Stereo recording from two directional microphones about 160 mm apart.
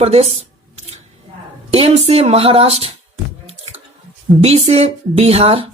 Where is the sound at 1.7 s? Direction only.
40° right (ahead or behind).